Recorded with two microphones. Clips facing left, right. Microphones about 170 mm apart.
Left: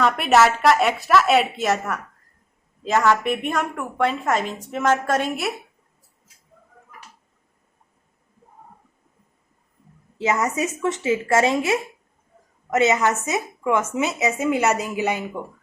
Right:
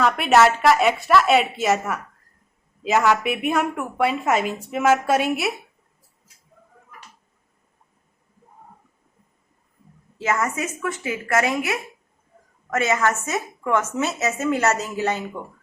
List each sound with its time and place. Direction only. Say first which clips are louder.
0.0 s a woman's voice: even; centre (ahead or behind)
2.8 s a woman's voice: even; 5° right (ahead or behind)
10.2 s a woman's voice: left 2 dB; 20° left (ahead or behind)